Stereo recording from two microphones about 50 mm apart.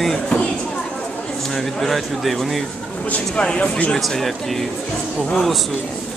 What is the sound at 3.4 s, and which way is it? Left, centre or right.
Speech, left.